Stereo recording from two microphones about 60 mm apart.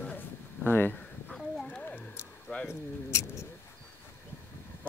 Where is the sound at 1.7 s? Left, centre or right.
Centre.